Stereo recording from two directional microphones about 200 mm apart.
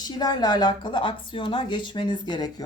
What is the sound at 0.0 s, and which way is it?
A woman's voice, 20° left (ahead or behind).